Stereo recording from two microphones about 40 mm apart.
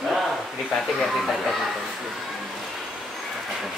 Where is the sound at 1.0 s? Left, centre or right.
Centre.